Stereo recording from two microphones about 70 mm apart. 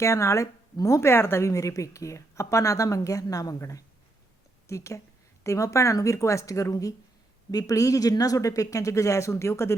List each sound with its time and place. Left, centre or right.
0.0 s speech: left